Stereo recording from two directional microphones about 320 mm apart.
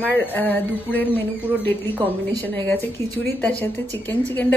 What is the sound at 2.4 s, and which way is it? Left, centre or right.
Speech, centre.